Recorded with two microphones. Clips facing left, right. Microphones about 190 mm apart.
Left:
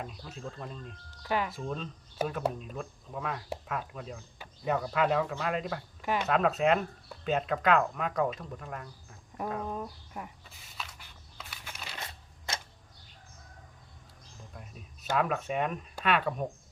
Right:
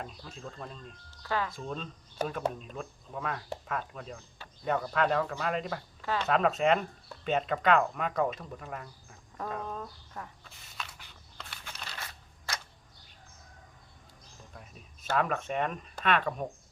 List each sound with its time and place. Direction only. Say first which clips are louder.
0.0 s speech: left 2 dB; 5° left (ahead or behind)
1.2 s speech: left 1 dB; 15° left (ahead or behind)
1.5 s speech: left 2 dB; 5° left (ahead or behind)
6.0 s speech: left 2 dB; 15° left (ahead or behind)
6.2 s speech: right 1 dB; centre (ahead or behind)
9.6 s speech: left 3 dB; 15° left (ahead or behind)
10.5 s a sound: even; centre (ahead or behind)
11.9 s a sound: left 2 dB; 25° left (ahead or behind)
14.5 s a sound: left 2 dB; centre (ahead or behind)
15.1 s speech: even; centre (ahead or behind)